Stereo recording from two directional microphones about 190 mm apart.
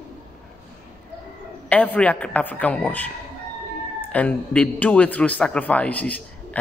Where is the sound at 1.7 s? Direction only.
10° left (ahead or behind).